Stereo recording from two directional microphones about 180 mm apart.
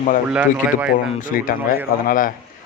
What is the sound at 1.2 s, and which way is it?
Speech, 50° left (ahead or behind).